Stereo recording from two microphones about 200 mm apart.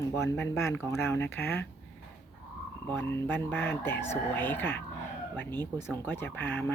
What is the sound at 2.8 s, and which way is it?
Speech, 10° left (ahead or behind).